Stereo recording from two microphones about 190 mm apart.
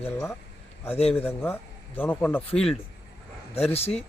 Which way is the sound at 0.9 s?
30° left (ahead or behind).